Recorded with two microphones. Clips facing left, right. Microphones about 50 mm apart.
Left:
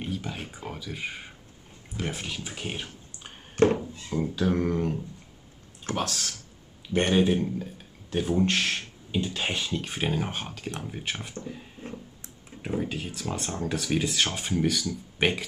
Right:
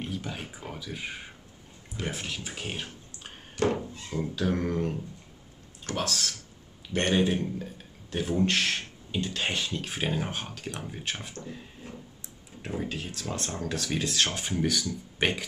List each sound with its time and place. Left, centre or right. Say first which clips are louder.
0.0 s speech: left 2 dB; centre
3.6 s thunk: left 5 dB; left
4.1 s speech: left 3 dB; centre
5.9 s speech: even; centre
12.6 s speech: left 3 dB; centre